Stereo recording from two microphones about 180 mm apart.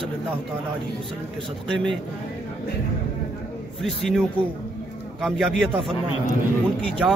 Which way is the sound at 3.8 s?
Centre (ahead or behind).